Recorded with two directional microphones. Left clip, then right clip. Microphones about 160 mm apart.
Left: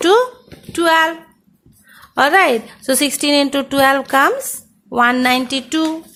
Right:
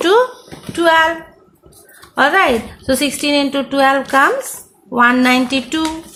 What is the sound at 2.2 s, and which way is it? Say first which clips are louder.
A woman's voice: even; 40° left (ahead or behind).